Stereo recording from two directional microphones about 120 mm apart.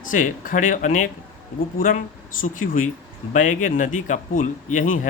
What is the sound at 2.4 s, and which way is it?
Speech, 90° left.